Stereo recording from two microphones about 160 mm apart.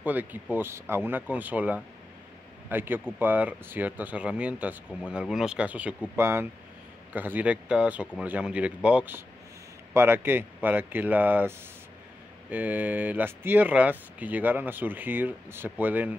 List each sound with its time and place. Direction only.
0.0 s speech: 10° right (ahead or behind)